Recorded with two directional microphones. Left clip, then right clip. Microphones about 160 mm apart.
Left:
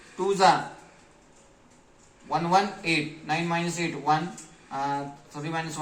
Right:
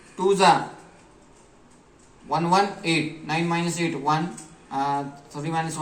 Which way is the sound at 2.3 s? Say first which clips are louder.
Right 2 dB; 30° left (ahead or behind).